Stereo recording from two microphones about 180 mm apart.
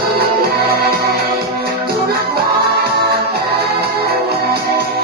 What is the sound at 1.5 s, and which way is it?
Music, 60° right (ahead or behind).